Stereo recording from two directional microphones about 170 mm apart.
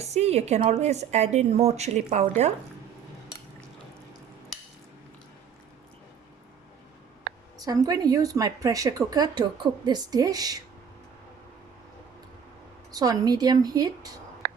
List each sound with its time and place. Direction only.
0.0 s a woman's voice: 40° right (ahead or behind)
7.6 s a woman's voice: 20° right (ahead or behind)
12.9 s a woman's voice: 20° right (ahead or behind)
14.4 s a sound: 60° right (ahead or behind)